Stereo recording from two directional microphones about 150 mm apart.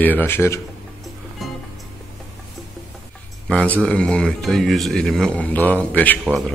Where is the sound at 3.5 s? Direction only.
5° left (ahead or behind).